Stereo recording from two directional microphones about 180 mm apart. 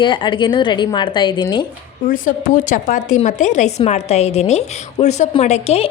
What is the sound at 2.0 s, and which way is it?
A woman's voice, 45° left (ahead or behind).